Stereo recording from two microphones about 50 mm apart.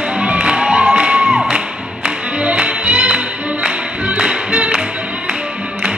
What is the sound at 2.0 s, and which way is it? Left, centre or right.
Music, right.